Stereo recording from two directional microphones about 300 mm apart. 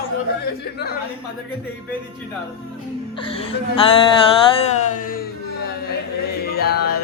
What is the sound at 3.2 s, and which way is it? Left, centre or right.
Speech, centre.